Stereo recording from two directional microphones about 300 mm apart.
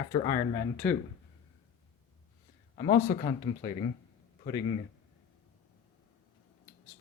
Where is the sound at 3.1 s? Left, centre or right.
Left.